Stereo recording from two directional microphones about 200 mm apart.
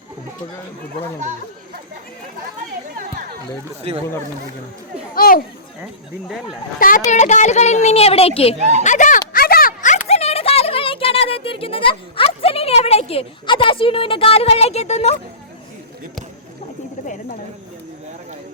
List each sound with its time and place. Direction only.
5.1 s speech: 45° left (ahead or behind)
5.8 s speech: 5° right (ahead or behind)
6.7 s a woman's voice: 45° left (ahead or behind)
8.5 s speech: 35° right (ahead or behind)
8.8 s a sound: 40° left (ahead or behind)